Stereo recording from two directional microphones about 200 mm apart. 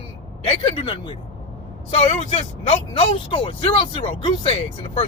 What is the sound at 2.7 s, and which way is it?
Speech, 25° left (ahead or behind).